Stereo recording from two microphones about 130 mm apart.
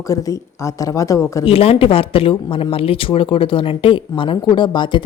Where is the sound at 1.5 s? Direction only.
45° left (ahead or behind).